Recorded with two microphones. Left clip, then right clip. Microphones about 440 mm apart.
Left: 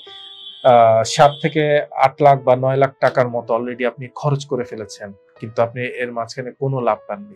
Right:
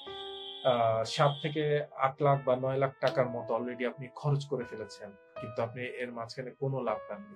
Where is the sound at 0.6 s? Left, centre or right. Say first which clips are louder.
Left 17 dB; left.